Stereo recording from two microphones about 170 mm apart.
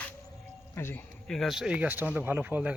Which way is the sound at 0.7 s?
15° left (ahead or behind).